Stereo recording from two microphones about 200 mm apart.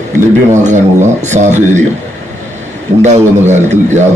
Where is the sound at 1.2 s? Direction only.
35° right (ahead or behind).